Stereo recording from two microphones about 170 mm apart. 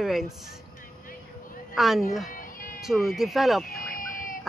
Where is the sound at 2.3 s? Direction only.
55° left (ahead or behind).